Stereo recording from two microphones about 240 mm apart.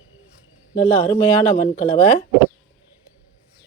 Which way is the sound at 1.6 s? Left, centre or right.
Left.